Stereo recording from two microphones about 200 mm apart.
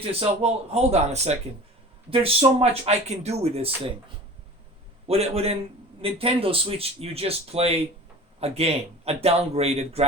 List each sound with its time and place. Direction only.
0.0 s speech: 30° right (ahead or behind)
5.0 s speech: 30° right (ahead or behind)